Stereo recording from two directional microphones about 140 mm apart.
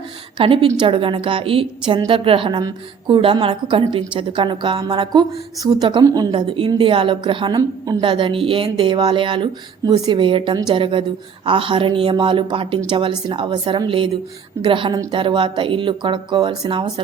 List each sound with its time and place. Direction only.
0.3 s a woman's voice: 40° right (ahead or behind)